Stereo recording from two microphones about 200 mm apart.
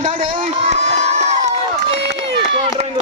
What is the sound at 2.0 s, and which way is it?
Run, 60° right (ahead or behind).